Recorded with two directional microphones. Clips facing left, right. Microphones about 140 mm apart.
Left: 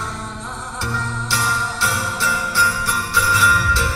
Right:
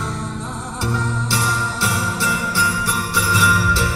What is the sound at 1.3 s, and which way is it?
Jingle bell, 20° right (ahead or behind).